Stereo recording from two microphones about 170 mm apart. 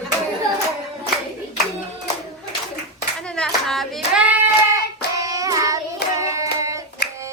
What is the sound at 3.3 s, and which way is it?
Hands, 5° left (ahead or behind).